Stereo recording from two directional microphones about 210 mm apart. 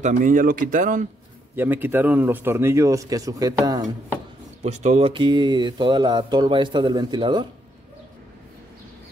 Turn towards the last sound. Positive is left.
turn(degrees=-20)  # may be behind; listen again after turning